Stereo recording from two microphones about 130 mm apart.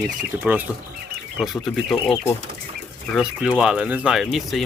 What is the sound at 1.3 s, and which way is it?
Speech, centre (ahead or behind).